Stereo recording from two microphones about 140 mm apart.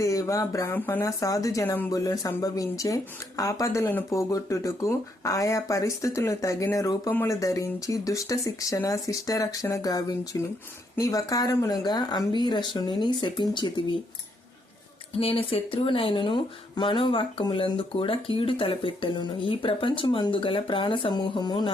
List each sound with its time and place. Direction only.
0.0 s speech: 25° left (ahead or behind)
15.2 s speech: 40° left (ahead or behind)